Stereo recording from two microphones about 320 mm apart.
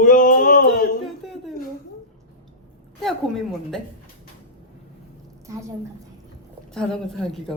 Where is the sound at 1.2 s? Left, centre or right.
Centre.